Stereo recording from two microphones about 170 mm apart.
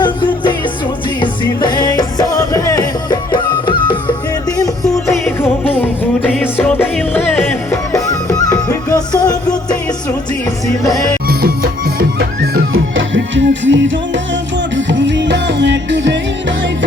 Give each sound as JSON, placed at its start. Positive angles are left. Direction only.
{"t": 0.0, "sound": "music", "side_deg": 25}
{"t": 5.6, "sound": "music", "side_deg": 10}
{"t": 11.3, "sound": "music", "side_deg": -65}